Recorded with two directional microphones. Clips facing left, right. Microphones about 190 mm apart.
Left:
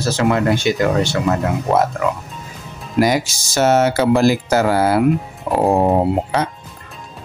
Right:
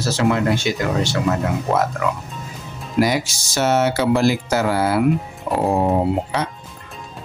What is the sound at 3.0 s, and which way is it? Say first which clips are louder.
Speech: left 2 dB; 45° left (ahead or behind).